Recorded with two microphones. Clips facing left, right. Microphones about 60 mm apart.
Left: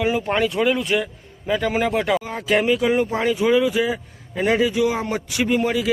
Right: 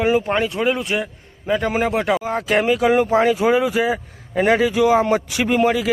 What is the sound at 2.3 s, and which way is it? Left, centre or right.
Speech, right.